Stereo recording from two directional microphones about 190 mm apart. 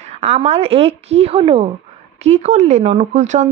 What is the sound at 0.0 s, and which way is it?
A woman's voice, 35° right (ahead or behind).